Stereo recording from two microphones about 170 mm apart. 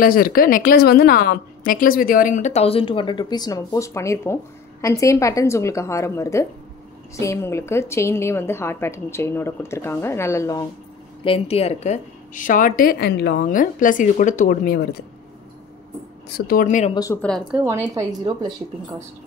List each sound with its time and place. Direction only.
0.0 s a woman's voice: 60° left (ahead or behind); by 10.6 s 20° left (ahead or behind)
11.2 s a woman's voice: 35° left (ahead or behind); by 13.5 s 70° left (ahead or behind)
13.5 s a woman's voice: 50° left (ahead or behind)
16.3 s speech: 65° left (ahead or behind); by 16.9 s 45° left (ahead or behind)
16.9 s a woman's voice: 20° left (ahead or behind)
17.2 s speech: 5° left (ahead or behind)
17.6 s a woman's voice: 20° right (ahead or behind)